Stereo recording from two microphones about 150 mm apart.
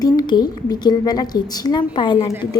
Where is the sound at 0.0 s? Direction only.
25° left (ahead or behind).